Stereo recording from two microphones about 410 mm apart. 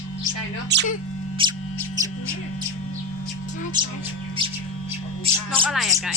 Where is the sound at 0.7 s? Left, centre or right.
Right.